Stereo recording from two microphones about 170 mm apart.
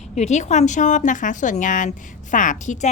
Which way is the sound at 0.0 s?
40° left (ahead or behind).